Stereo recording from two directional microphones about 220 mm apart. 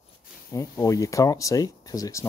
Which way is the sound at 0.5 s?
15° left (ahead or behind).